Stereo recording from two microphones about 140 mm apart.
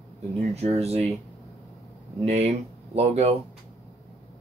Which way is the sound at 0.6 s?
50° right (ahead or behind).